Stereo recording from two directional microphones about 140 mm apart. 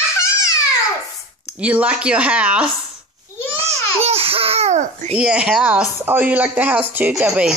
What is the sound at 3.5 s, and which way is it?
Babbling, 45° right (ahead or behind).